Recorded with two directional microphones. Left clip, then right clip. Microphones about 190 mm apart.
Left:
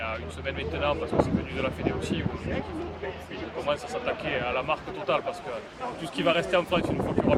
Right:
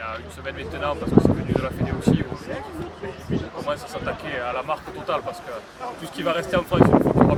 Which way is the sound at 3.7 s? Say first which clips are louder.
Even; 10° right (ahead or behind).